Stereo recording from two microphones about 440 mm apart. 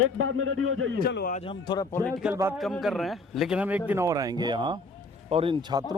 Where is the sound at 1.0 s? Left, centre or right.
Left.